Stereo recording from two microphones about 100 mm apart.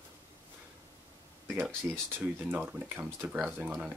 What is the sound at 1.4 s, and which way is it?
Speech, 20° right (ahead or behind).